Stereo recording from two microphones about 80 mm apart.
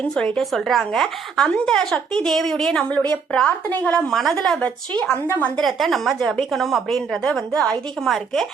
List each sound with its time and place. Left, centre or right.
0.1 s a woman's voice: centre
4.1 s a woman's voice: centre
5.5 s a woman's voice: centre